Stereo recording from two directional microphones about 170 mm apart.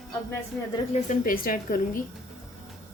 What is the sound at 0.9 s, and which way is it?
A woman's voice, 55° left (ahead or behind).